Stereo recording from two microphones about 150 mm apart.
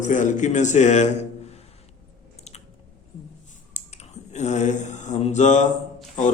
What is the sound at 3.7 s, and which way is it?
Mantra, 50° left (ahead or behind).